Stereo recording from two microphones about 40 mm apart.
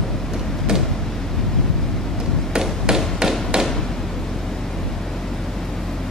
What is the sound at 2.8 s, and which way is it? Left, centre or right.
Tap, centre.